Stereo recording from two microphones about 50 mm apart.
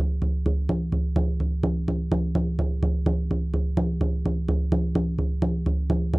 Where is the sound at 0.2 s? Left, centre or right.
Centre.